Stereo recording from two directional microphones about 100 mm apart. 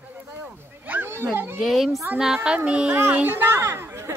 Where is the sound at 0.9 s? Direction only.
20° right (ahead or behind).